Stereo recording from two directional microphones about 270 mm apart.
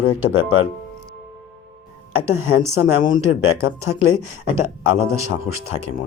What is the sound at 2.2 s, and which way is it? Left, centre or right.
Speech, centre.